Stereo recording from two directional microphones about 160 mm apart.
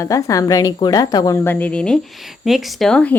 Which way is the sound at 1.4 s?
10° left (ahead or behind).